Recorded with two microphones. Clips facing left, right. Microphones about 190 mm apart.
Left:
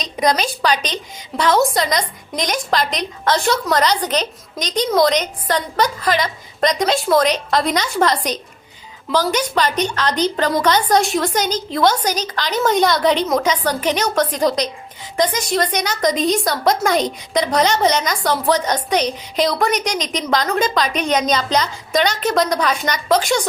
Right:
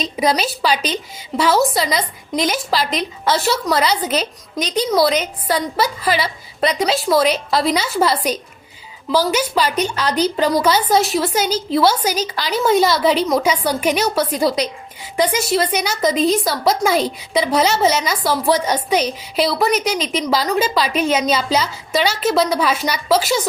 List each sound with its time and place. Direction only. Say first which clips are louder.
0.0 s a woman's voice: even; 5° right (ahead or behind)